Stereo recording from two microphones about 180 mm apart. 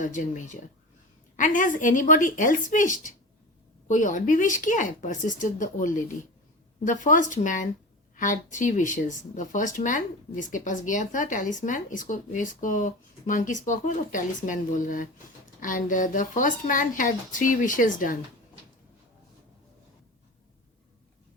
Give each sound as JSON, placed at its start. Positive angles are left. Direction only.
{"t": 0.0, "sound": "speech", "side_deg": 45}